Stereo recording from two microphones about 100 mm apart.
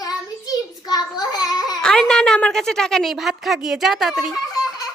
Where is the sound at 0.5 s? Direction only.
40° left (ahead or behind).